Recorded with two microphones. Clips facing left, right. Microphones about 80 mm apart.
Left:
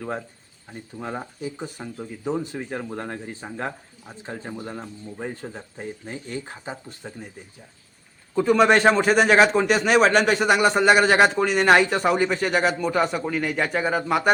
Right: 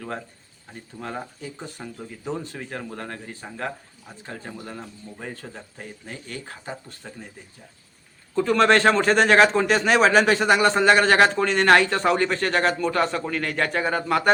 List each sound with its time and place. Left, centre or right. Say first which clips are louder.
0.7 s speech: left 2 dB; centre
8.4 s speech: left 1 dB; centre